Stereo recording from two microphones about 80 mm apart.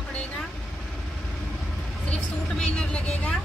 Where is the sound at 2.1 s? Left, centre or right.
Centre.